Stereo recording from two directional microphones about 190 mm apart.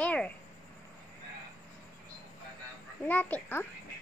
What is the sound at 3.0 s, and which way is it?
Speech, 10° left (ahead or behind).